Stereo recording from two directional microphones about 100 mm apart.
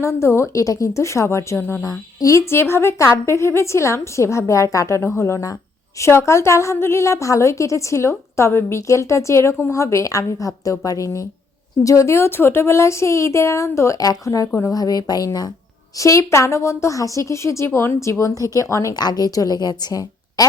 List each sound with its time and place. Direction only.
0.0 s a woman's voice: 30° left (ahead or behind)
1.8 s a woman's voice: 40° left (ahead or behind)